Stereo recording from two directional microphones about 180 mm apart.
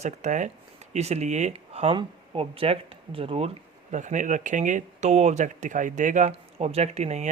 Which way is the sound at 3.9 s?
45° right (ahead or behind).